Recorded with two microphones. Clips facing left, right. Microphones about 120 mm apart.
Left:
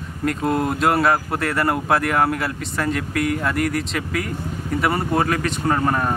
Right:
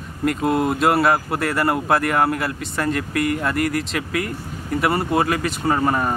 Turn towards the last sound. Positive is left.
turn(degrees=-5)  # may be behind; listen again after turning